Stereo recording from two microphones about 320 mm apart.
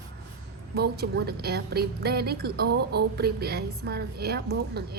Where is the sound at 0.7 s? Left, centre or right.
Right.